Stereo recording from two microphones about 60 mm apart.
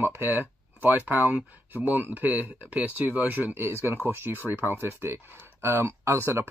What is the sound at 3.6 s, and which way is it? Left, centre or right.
Speech, right.